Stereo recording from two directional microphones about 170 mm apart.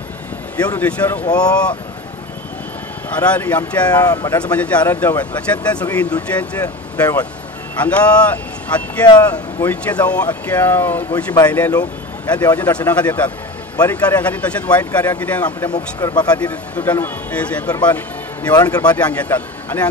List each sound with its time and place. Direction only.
0.7 s speech: 10° left (ahead or behind)
3.2 s speech: 10° left (ahead or behind)
3.9 s speech: 20° left (ahead or behind)
4.5 s speech: 10° left (ahead or behind)
9.0 s speech: 25° left (ahead or behind)
9.7 s speech: 10° left (ahead or behind)
15.7 s speech: 25° left (ahead or behind)
16.3 s speech: 10° left (ahead or behind)
17.8 s music: 10° left (ahead or behind)
18.5 s speech: 25° left (ahead or behind)
18.9 s speech: 10° left (ahead or behind)